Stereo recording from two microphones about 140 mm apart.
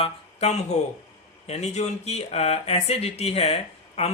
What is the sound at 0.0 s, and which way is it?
Speech, 50° left (ahead or behind).